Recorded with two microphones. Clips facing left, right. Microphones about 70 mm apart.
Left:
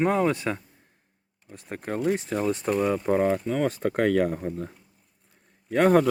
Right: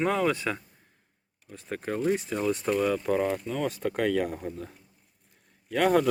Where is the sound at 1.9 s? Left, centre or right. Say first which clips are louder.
Left 2 dB; left.